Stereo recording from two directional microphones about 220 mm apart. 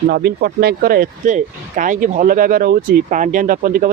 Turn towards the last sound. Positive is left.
turn(degrees=-35)  # may be behind; listen again after turning